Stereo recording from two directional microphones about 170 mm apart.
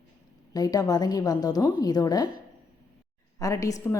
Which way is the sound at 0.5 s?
20° left (ahead or behind).